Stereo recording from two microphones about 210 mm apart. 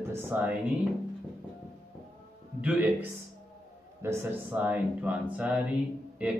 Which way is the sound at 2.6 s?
5° right (ahead or behind).